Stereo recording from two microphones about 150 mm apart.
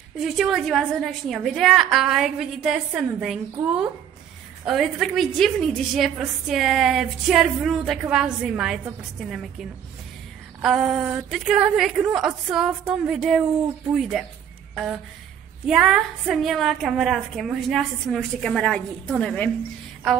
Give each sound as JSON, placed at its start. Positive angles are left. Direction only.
{"t": 0.2, "sound": "a woman's voice", "side_deg": 0}
{"t": 15.7, "sound": "a woman's voice", "side_deg": 0}